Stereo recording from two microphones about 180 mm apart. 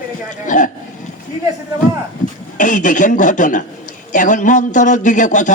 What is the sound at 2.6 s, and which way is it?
Speech, 45° left (ahead or behind).